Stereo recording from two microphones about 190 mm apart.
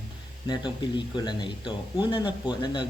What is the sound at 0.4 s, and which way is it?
Speech, 25° left (ahead or behind).